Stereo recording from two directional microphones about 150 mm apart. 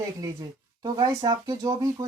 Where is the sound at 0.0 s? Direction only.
25° right (ahead or behind).